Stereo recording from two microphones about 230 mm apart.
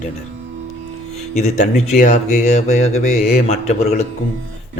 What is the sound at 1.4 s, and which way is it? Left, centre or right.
Speech, left.